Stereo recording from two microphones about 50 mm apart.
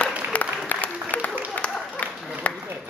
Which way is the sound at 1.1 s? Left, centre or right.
Left.